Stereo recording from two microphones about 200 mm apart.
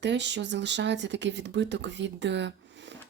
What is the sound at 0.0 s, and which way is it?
A woman's voice, 60° right (ahead or behind).